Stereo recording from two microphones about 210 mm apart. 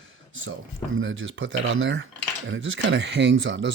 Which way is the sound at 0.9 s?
65° right (ahead or behind).